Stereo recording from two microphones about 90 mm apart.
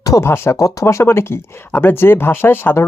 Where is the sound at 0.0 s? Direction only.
40° left (ahead or behind).